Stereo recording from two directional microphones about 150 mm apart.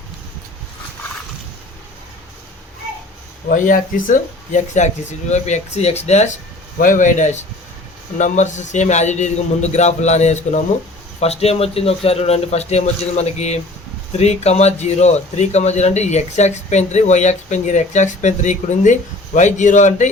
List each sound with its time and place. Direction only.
3.5 s speech: 60° left (ahead or behind)